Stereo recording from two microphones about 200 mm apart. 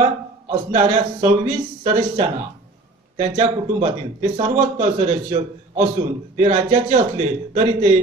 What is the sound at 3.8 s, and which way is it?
A man's voice, 30° right (ahead or behind).